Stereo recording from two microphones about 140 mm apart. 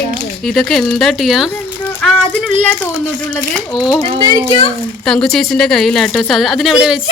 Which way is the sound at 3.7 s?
5° right (ahead or behind).